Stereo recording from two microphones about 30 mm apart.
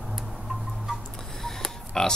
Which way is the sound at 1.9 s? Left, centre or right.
Left.